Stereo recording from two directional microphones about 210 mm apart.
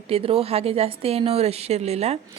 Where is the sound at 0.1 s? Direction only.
25° right (ahead or behind).